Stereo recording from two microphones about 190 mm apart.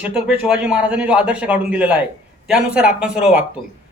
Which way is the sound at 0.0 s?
5° right (ahead or behind).